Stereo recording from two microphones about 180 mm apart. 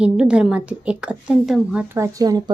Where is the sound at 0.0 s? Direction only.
5° right (ahead or behind).